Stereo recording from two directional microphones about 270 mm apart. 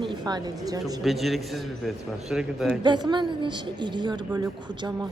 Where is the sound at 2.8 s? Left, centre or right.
Centre.